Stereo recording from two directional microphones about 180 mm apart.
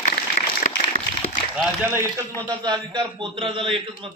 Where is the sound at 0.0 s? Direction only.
40° left (ahead or behind).